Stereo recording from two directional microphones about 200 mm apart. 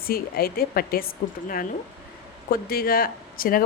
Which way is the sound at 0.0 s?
50° left (ahead or behind).